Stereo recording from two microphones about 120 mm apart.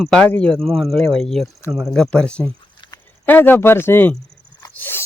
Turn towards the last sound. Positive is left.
turn(degrees=15)  # may be behind; listen again after turning